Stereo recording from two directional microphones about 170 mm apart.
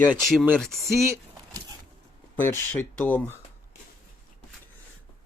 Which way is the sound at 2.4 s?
10° left (ahead or behind).